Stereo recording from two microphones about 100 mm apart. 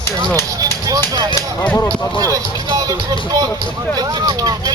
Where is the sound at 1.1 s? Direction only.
40° right (ahead or behind).